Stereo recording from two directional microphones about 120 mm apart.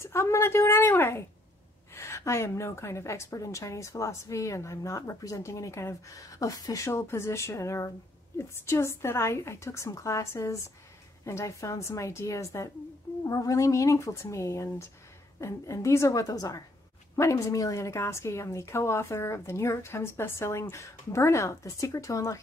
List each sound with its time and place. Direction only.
0.0 s a woman's voice: 20° left (ahead or behind)